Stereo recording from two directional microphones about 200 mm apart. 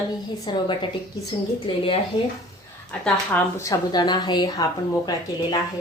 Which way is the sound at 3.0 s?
10° left (ahead or behind).